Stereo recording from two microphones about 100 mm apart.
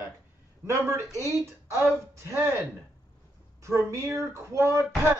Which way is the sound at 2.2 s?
25° right (ahead or behind).